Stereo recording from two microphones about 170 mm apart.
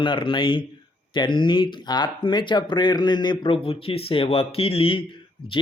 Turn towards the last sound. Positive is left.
turn(degrees=30)  # may be behind; listen again after turning